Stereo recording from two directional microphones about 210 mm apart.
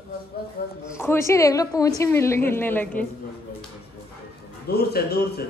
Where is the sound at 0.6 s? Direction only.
45° left (ahead or behind).